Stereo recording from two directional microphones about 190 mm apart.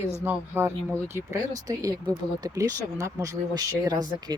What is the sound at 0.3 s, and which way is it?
Speech, 10° right (ahead or behind).